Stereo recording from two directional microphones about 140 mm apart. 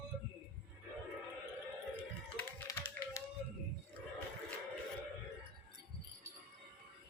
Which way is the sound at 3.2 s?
20° left (ahead or behind).